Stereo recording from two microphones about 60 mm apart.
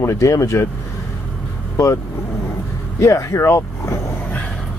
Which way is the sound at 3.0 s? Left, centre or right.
Left.